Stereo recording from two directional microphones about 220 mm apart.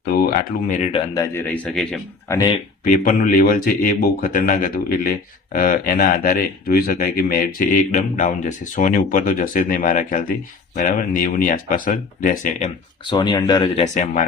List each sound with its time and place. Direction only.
0.1 s speech: 40° left (ahead or behind)
0.9 s speech: 20° left (ahead or behind); by 2.4 s 5° left (ahead or behind)
2.8 s speech: 40° left (ahead or behind)
13.1 s speech: 20° left (ahead or behind)
13.8 s speech: 35° left (ahead or behind)